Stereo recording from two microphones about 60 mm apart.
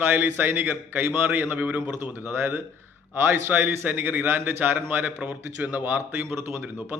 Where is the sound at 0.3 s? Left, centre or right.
Right.